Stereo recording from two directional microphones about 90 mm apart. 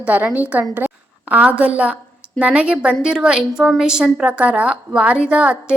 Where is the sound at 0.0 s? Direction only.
20° right (ahead or behind).